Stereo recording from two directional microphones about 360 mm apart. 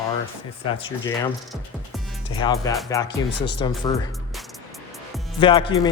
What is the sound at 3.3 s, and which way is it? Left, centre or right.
Speech, left.